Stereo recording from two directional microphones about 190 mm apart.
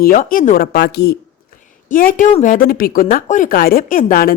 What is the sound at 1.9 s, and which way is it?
A woman's voice, 45° left (ahead or behind).